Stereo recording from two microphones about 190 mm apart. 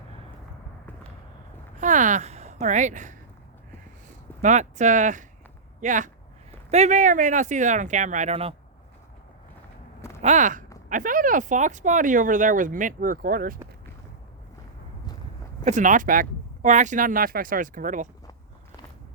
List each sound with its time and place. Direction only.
1.8 s speech: 40° right (ahead or behind)
10.2 s speech: 40° right (ahead or behind)
15.6 s speech: 40° right (ahead or behind)